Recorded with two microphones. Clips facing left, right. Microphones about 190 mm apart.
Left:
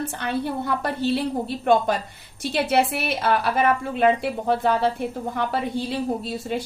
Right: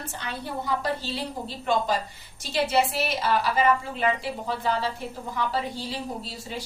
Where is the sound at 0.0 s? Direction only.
60° left (ahead or behind).